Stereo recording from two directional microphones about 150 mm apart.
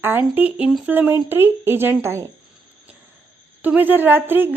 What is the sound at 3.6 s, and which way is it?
Speech, 10° right (ahead or behind).